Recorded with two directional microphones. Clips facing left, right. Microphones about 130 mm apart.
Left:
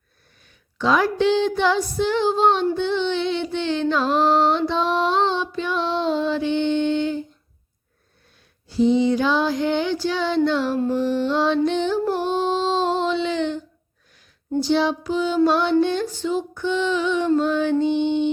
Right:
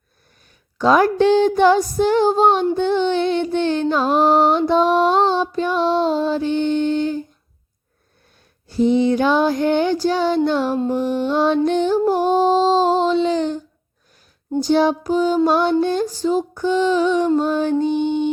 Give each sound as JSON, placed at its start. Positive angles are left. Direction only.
{"t": 0.8, "sound": "music", "side_deg": -45}
{"t": 8.6, "sound": "music", "side_deg": -50}
{"t": 14.6, "sound": "music", "side_deg": -45}